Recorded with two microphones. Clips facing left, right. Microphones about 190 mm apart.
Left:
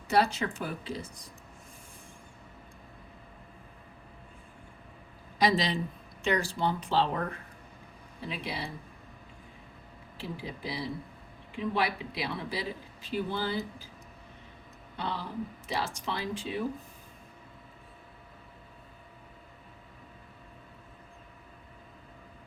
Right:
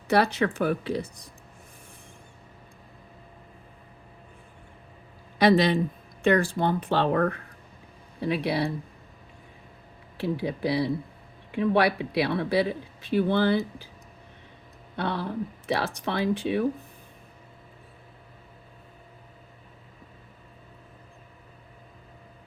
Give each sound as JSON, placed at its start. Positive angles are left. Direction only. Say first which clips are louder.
{"t": 0.1, "sound": "speech", "louder": "right 4 dB", "side_deg": -65}
{"t": 5.4, "sound": "speech", "louder": "right 7 dB", "side_deg": -60}
{"t": 10.2, "sound": "speech", "louder": "right 11 dB", "side_deg": -70}
{"t": 14.9, "sound": "speech", "louder": "right 6 dB", "side_deg": -65}